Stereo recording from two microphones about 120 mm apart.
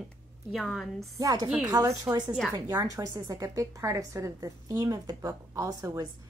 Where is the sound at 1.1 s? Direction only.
30° right (ahead or behind).